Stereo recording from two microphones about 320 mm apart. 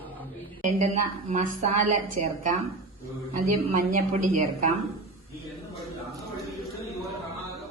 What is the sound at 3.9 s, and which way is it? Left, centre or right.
Speech, right.